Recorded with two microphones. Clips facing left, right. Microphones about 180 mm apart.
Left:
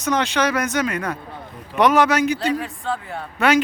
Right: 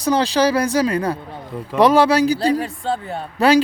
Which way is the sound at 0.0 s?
35° right (ahead or behind).